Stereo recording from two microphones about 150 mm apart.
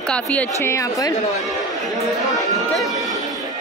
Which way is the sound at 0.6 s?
20° left (ahead or behind).